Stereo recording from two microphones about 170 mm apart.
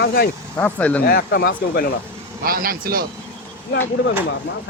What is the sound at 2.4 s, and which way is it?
Speech, 60° right (ahead or behind).